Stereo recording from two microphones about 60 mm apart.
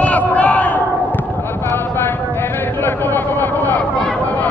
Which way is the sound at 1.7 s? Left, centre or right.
Left.